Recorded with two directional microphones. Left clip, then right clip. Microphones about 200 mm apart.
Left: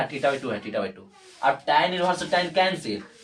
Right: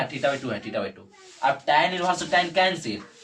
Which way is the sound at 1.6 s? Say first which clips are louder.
Right 1 dB; 20° left (ahead or behind).